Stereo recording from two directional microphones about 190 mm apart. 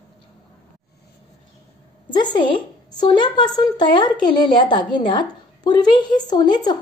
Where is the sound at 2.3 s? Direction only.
25° left (ahead or behind).